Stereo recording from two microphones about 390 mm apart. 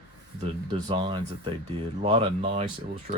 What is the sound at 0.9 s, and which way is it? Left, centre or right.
Speech, centre.